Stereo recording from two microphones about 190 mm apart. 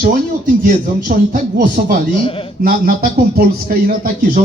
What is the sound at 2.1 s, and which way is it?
Speech, 30° left (ahead or behind).